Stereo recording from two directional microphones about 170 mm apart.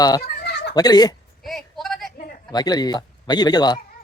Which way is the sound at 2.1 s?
60° left (ahead or behind).